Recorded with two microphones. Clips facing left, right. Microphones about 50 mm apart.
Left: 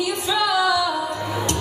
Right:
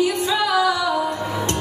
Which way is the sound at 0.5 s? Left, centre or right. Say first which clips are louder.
Even; right.